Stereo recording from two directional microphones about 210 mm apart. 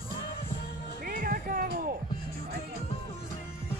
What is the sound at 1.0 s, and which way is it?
Music, 40° right (ahead or behind).